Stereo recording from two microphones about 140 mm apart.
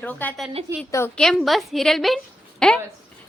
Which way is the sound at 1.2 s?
Centre (ahead or behind).